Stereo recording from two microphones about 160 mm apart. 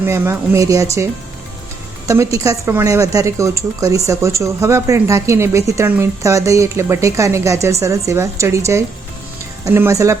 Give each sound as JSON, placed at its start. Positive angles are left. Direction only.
{"t": 0.0, "sound": "a woman's voice", "side_deg": -15}